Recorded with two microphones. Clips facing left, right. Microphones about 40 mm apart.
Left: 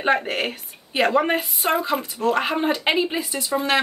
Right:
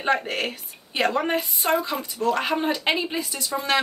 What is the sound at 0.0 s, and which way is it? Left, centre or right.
A woman's voice, centre.